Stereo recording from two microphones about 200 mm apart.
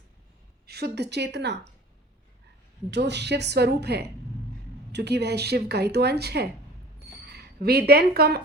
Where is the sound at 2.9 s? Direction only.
60° right (ahead or behind).